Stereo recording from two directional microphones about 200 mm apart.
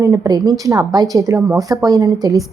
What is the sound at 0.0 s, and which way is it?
A woman's voice, 15° right (ahead or behind).